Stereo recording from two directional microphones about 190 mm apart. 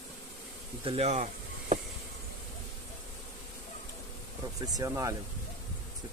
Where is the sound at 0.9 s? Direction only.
35° right (ahead or behind).